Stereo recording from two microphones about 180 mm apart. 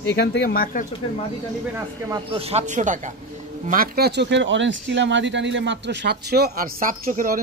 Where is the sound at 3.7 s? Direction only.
55° right (ahead or behind).